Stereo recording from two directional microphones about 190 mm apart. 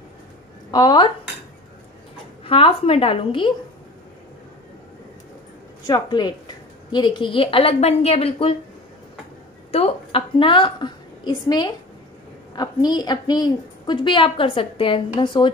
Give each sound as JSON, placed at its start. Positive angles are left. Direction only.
{"t": 0.7, "sound": "a woman's voice", "side_deg": 20}
{"t": 2.4, "sound": "a woman's voice", "side_deg": 30}
{"t": 5.9, "sound": "a woman's voice", "side_deg": 20}
{"t": 9.7, "sound": "a woman's voice", "side_deg": 35}